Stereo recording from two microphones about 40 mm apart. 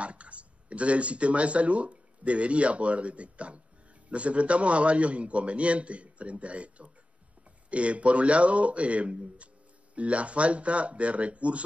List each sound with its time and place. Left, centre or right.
0.0 s a man's voice: right